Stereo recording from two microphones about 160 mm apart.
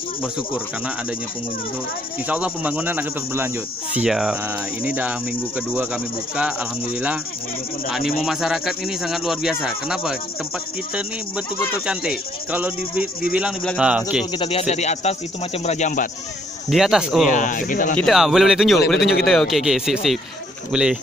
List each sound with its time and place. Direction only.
2.2 s speech: 10° right (ahead or behind)
8.2 s speech: centre (ahead or behind)
11.8 s speech: 5° right (ahead or behind)
14.3 s speech: 35° left (ahead or behind); by 16.1 s 50° left (ahead or behind)
16.6 s speech: centre (ahead or behind)
17.3 s speech: 55° left (ahead or behind)
17.9 s speech: centre (ahead or behind)